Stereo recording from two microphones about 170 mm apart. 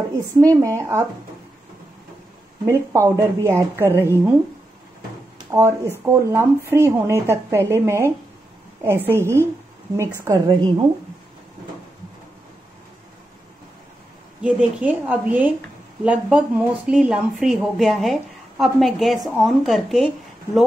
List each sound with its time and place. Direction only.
0.4 s speech: 20° right (ahead or behind)
2.6 s speech: 15° right (ahead or behind)
5.5 s speech: 15° right (ahead or behind)
14.4 s a woman's voice: 10° right (ahead or behind)